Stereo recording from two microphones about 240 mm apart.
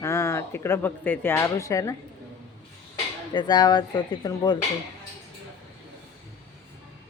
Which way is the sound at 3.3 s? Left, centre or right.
Centre.